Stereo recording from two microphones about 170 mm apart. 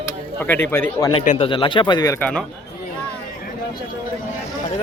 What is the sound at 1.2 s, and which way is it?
Speech, 45° left (ahead or behind).